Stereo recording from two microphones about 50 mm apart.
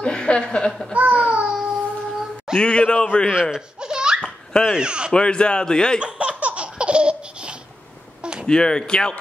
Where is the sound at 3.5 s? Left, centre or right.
Centre.